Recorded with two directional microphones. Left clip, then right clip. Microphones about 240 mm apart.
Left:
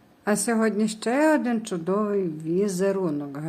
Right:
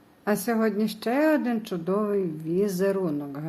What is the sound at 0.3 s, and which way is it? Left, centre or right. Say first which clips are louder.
A woman's voice: left 1 dB; centre.